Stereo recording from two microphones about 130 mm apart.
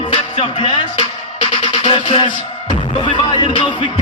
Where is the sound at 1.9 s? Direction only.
45° left (ahead or behind).